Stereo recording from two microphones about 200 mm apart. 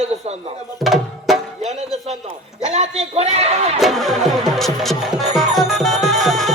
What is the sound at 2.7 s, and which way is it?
Speech, 30° right (ahead or behind).